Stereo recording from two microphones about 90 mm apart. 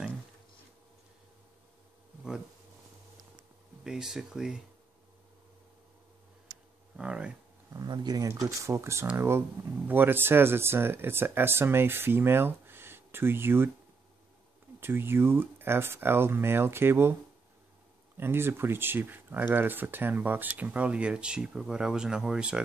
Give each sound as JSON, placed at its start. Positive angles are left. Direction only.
{"t": 3.8, "sound": "speech", "side_deg": -5}
{"t": 7.0, "sound": "speech", "side_deg": -10}
{"t": 7.9, "sound": "speech", "side_deg": -55}
{"t": 8.2, "sound": "speech", "side_deg": -40}
{"t": 14.8, "sound": "speech", "side_deg": -25}
{"t": 18.1, "sound": "speech", "side_deg": -25}